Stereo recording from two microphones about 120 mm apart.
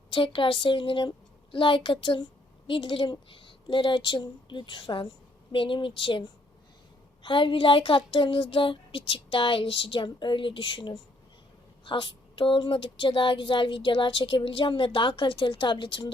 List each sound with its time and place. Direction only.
0.1 s speech: 45° left (ahead or behind)